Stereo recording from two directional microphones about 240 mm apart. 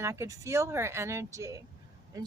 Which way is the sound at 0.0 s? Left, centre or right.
Centre.